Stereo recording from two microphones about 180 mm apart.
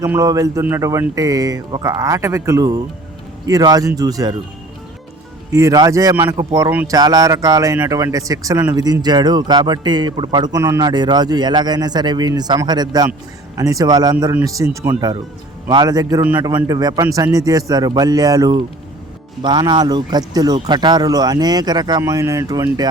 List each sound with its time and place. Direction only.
0.0 s a man's voice: 15° right (ahead or behind)
5.5 s a man's voice: 15° right (ahead or behind)
16.2 s a man's voice: 10° right (ahead or behind)